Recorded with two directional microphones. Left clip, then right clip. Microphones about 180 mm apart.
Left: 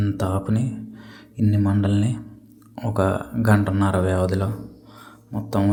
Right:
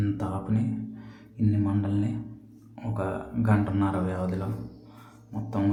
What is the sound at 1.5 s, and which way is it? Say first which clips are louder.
Speech: left 6 dB; 30° left (ahead or behind).